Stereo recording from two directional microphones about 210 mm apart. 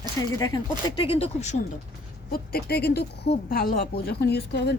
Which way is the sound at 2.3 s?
45° left (ahead or behind).